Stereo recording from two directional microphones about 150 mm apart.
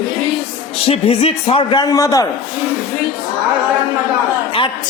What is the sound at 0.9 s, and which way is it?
A man's voice, 40° left (ahead or behind).